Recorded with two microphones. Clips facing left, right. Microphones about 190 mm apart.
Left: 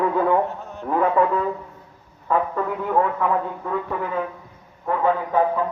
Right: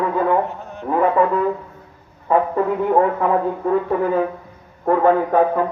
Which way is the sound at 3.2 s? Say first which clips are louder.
Right 4 dB; 35° right (ahead or behind).